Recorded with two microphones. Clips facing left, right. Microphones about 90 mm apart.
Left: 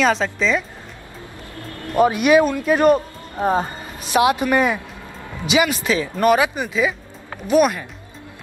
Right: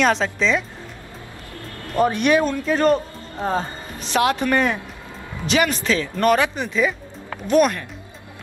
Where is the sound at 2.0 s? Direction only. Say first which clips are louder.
Left 3 dB; 10° left (ahead or behind).